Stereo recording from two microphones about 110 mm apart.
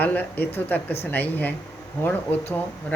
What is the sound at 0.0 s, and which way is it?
Speech, 15° left (ahead or behind).